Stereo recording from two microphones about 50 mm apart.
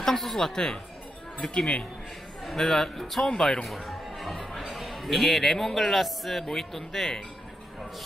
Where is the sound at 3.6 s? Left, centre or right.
Centre.